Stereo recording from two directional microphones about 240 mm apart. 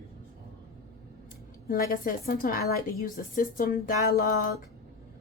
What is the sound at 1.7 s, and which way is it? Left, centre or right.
A woman's voice, left.